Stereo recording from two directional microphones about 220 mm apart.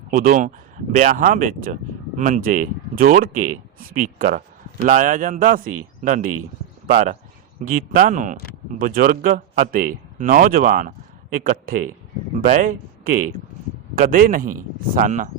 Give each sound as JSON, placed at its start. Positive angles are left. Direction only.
{"t": 0.1, "sound": "speech", "side_deg": -35}